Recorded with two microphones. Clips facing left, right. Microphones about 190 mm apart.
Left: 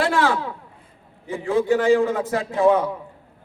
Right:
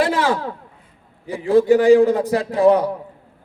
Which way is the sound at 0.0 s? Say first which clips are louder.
Right 2 dB; 20° right (ahead or behind).